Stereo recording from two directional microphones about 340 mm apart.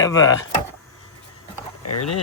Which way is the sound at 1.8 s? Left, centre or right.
Left.